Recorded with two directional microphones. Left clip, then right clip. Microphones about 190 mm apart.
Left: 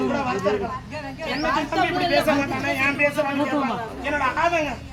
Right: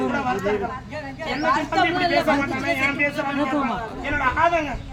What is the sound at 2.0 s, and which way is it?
Speech, 55° right (ahead or behind).